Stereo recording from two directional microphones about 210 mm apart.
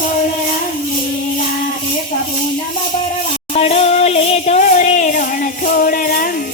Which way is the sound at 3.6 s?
30° left (ahead or behind).